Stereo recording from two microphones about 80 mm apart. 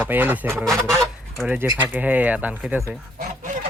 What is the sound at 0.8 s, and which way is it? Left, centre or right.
Goose, right.